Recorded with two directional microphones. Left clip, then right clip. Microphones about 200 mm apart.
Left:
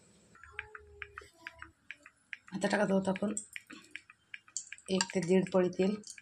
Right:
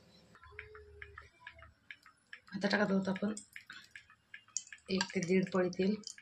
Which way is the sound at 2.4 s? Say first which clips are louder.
Left 2 dB; 40° left (ahead or behind).